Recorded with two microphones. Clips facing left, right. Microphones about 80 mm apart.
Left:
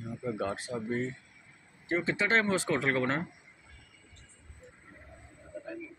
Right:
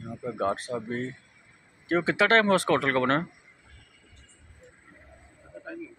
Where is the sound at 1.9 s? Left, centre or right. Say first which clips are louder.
Right 6 dB; right.